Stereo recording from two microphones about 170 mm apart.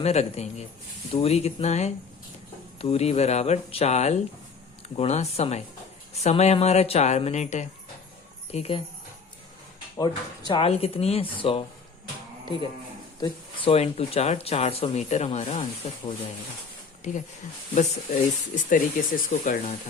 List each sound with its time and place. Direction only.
0.0 s speech: 40° left (ahead or behind)
10.0 s speech: 25° left (ahead or behind)
13.1 s speech: 30° left (ahead or behind); by 17.2 s 45° left (ahead or behind)
18.5 s speech: 50° left (ahead or behind)